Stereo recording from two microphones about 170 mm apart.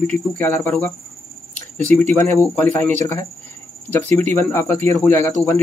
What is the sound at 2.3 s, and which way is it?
Speech, 10° left (ahead or behind).